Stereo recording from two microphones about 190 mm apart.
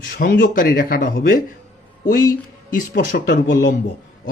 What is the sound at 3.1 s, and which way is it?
Speech, 65° left (ahead or behind).